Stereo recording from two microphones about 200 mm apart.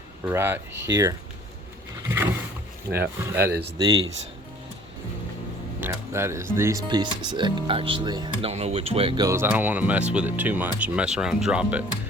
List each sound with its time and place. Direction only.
0.3 s speech: 10° right (ahead or behind)
2.0 s boat: 10° right (ahead or behind)
2.9 s speech: 10° right (ahead or behind)
5.8 s speech: 15° right (ahead or behind)